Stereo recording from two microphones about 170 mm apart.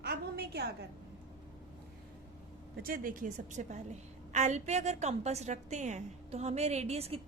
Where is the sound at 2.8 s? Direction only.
55° right (ahead or behind).